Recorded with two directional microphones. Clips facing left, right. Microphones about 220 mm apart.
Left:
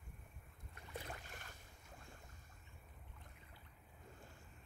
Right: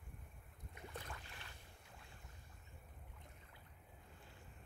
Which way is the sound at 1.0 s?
45° left (ahead or behind).